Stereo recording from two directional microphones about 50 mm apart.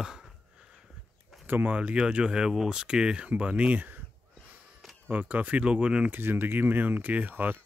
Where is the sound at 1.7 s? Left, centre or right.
Right.